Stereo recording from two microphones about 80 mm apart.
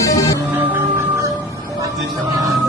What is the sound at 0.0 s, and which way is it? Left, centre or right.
Music, left.